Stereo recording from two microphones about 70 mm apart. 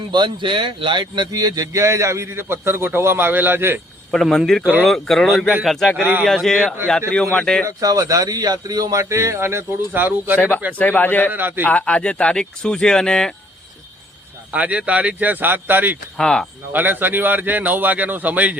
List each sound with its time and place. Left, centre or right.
0.1 s speech: right
1.8 s a man's voice: right
4.1 s speech: centre
6.0 s a man's voice: centre
6.2 s speech: centre
7.8 s a man's voice: right
10.8 s speech: left
11.3 s a man's voice: right
11.6 s speech: left
14.5 s a man's voice: centre
16.1 s speech: centre
16.7 s a man's voice: right